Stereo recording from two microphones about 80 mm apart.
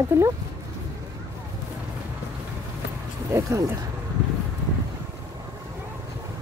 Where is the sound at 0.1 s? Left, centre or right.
Right.